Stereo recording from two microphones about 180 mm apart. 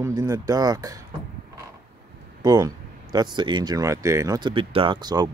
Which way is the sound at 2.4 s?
20° right (ahead or behind).